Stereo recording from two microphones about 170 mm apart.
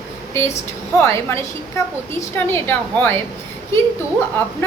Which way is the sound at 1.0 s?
15° left (ahead or behind).